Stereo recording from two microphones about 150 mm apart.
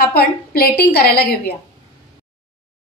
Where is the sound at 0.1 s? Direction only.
90° left.